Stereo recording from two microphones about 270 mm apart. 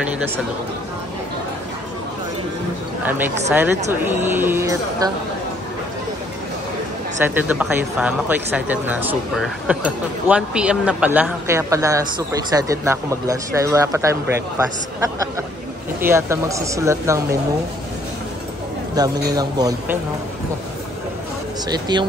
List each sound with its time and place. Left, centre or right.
3.0 s speech: centre
7.2 s speech: centre
16.0 s speech: centre
18.9 s speech: centre
21.6 s speech: centre